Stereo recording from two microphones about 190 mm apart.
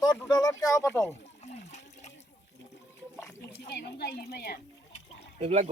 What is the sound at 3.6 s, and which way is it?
Speech, 60° left (ahead or behind).